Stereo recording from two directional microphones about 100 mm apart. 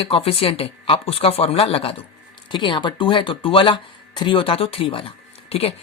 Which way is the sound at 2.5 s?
50° left (ahead or behind).